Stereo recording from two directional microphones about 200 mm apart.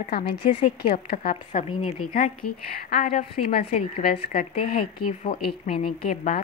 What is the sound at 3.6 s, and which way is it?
A woman's voice, 30° left (ahead or behind).